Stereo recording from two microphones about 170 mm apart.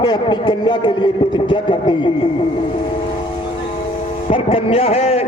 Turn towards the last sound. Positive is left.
turn(degrees=35)  # may be behind; listen again after turning